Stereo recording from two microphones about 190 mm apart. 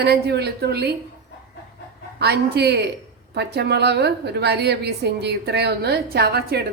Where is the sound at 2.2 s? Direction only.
60° right (ahead or behind).